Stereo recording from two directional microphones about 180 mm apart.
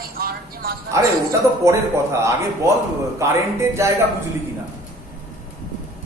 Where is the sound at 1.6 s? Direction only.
15° right (ahead or behind).